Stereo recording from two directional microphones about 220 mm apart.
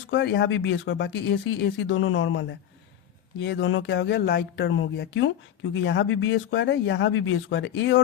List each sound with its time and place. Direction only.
0.1 s speech: 50° left (ahead or behind)